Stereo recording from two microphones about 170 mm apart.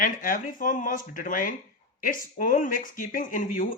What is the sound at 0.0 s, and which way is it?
Speech, 55° left (ahead or behind).